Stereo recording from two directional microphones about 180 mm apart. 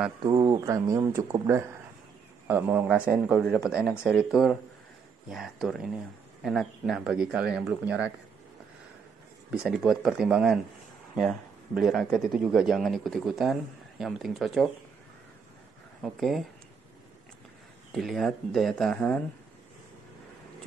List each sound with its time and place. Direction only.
0.2 s a man's voice: 20° right (ahead or behind)
9.5 s a man's voice: centre (ahead or behind)
16.0 s a man's voice: centre (ahead or behind)
17.9 s a man's voice: centre (ahead or behind)